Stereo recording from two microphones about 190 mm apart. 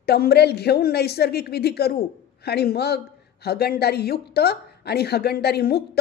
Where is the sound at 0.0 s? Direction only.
55° left (ahead or behind).